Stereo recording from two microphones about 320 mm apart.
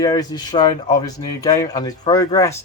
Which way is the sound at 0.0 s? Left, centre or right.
Centre.